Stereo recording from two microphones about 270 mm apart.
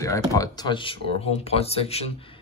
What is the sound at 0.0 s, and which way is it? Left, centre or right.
Speech, centre.